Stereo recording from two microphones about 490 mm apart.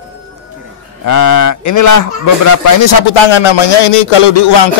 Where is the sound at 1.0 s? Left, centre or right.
Left.